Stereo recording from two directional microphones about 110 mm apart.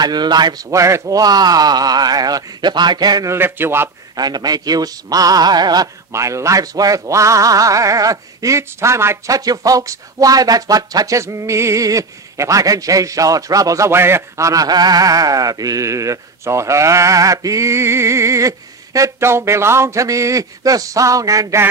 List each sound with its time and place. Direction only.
0.0 s speech: 40° right (ahead or behind)
0.7 s speech: 30° right (ahead or behind)
3.3 s speech: 20° right (ahead or behind)
4.2 s speech: 35° right (ahead or behind)
6.1 s speech: 25° right (ahead or behind)